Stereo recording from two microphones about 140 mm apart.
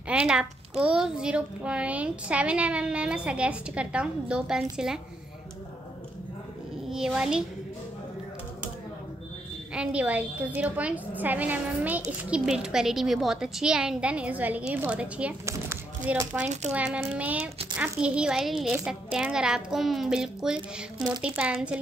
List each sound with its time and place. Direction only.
0.1 s a child's voice: 5° right (ahead or behind)
6.9 s a woman's voice: 5° right (ahead or behind)
9.8 s a child's voice: 10° right (ahead or behind)
15.4 s a sound: 20° right (ahead or behind)
16.7 s a child's voice: 10° right (ahead or behind)